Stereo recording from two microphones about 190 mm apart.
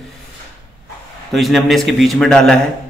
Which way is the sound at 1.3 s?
Centre (ahead or behind).